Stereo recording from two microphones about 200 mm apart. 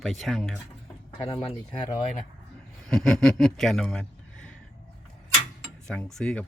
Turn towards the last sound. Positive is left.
turn(degrees=5)  # may be behind; listen again after turning